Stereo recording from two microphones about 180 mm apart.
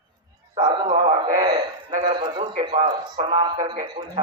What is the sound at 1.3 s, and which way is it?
Speech, 45° right (ahead or behind).